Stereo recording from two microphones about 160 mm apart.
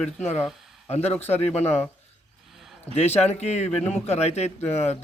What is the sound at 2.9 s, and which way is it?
A man's voice, 40° left (ahead or behind).